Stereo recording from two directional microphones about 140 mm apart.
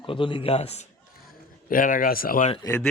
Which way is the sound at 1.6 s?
80° left.